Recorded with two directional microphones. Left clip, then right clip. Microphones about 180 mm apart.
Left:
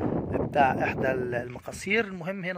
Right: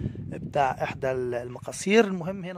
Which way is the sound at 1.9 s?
90° right.